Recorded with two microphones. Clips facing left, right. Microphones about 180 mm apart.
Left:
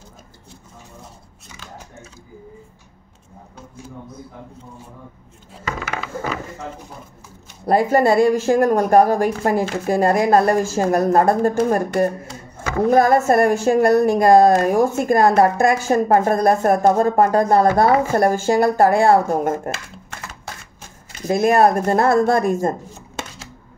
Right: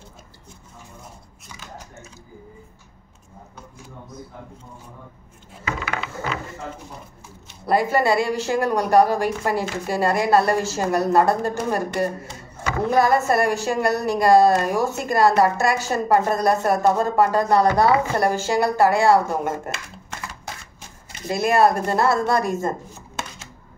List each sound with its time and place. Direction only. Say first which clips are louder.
7.6 s a woman's voice: left 4 dB; 45° left (ahead or behind)
21.3 s a woman's voice: left 3 dB; 50° left (ahead or behind)